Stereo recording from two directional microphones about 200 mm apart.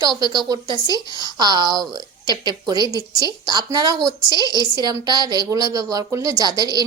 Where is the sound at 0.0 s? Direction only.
20° right (ahead or behind).